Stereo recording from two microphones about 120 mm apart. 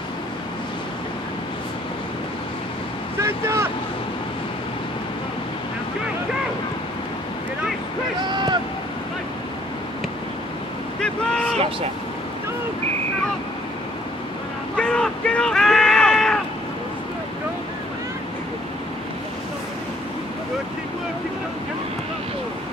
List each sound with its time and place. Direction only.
3.2 s vehicle: 25° right (ahead or behind)
8.3 s boat: 40° right (ahead or behind)
11.0 s boat: 5° left (ahead or behind)
14.8 s a sound: 10° left (ahead or behind)